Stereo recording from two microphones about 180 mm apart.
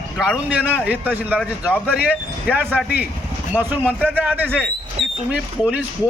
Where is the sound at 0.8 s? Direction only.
10° right (ahead or behind).